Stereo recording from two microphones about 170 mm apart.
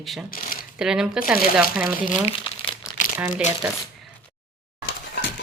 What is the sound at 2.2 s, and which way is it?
Crumpling, 30° left (ahead or behind).